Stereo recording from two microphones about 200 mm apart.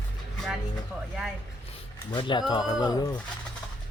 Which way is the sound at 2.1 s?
25° left (ahead or behind).